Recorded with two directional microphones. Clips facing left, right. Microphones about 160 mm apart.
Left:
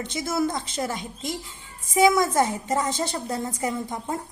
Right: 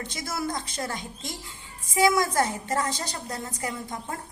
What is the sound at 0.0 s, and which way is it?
A woman's voice, 25° left (ahead or behind).